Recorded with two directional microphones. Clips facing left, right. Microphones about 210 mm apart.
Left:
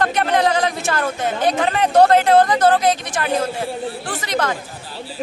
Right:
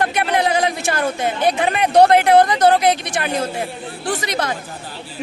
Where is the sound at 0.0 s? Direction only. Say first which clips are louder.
Left 1 dB; 10° right (ahead or behind).